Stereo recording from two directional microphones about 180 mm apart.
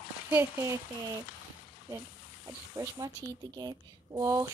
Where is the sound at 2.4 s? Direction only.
20° right (ahead or behind).